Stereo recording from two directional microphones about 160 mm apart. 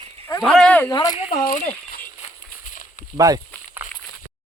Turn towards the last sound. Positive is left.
turn(degrees=-20)  # may be behind; listen again after turning